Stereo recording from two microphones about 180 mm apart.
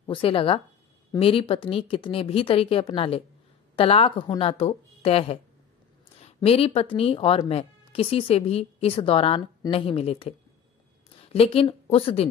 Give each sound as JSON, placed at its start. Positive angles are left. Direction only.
{"t": 0.0, "sound": "speech", "side_deg": 30}
{"t": 11.3, "sound": "speech", "side_deg": 30}